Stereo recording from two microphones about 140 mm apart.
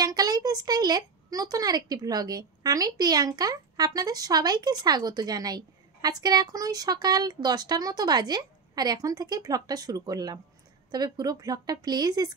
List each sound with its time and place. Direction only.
0.0 s a woman's voice: 30° right (ahead or behind)